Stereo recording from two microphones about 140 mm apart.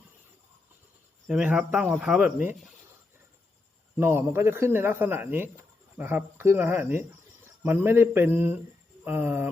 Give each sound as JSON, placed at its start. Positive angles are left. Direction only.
{"t": 1.3, "sound": "speech", "side_deg": -10}
{"t": 3.9, "sound": "speech", "side_deg": -15}